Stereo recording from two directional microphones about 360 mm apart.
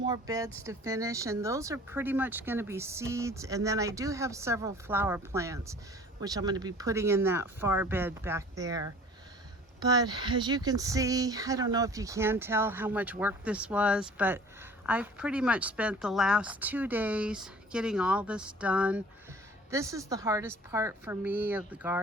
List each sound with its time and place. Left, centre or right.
0.0 s speech: centre
9.8 s speech: centre